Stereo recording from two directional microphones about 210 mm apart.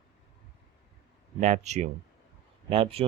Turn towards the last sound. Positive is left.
turn(degrees=-25)  # may be behind; listen again after turning